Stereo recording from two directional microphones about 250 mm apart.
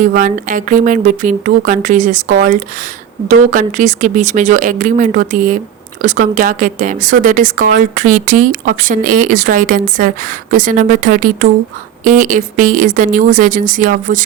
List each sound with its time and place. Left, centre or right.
0.0 s speech: right